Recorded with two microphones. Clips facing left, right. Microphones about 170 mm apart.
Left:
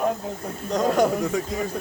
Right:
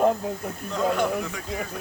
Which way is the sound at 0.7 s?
40° left (ahead or behind).